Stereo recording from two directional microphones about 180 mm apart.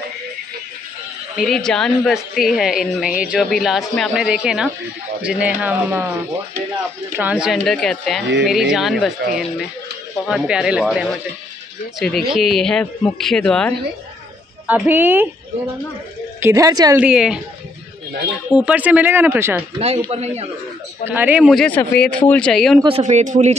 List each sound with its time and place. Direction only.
1.3 s a man's voice: centre (ahead or behind)
7.2 s a man's voice: 5° right (ahead or behind)
10.2 s a man's voice: 5° right (ahead or behind)
14.7 s speech: 10° right (ahead or behind)
16.3 s speech: 15° right (ahead or behind)
17.0 s a man's voice: 5° right (ahead or behind)
18.5 s speech: 5° right (ahead or behind)
19.8 s speech: 35° right (ahead or behind)
21.1 s a man's voice: 10° right (ahead or behind)
22.8 s speech: 30° right (ahead or behind)